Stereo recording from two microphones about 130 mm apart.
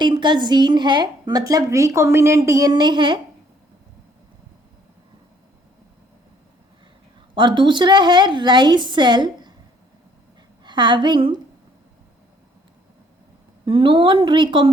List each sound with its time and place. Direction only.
0.0 s a woman's voice: 35° right (ahead or behind)
7.3 s a woman's voice: 35° right (ahead or behind)
10.6 s a woman's voice: 35° right (ahead or behind)
13.7 s a woman's voice: 40° right (ahead or behind)